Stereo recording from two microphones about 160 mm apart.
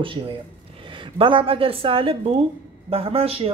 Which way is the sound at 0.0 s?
35° right (ahead or behind).